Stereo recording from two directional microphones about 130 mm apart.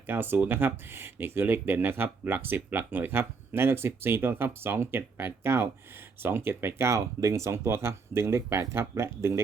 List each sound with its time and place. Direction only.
0.1 s speech: 15° right (ahead or behind)